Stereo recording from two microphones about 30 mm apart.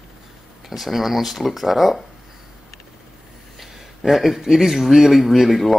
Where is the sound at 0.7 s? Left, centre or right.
Centre.